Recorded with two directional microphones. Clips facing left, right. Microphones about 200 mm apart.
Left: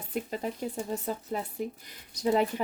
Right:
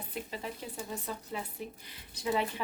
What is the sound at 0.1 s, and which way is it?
A woman's voice, 45° left (ahead or behind).